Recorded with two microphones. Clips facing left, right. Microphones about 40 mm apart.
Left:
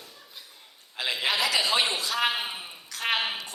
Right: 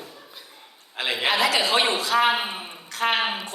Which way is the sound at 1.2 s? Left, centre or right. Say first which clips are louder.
Right 4 dB; right.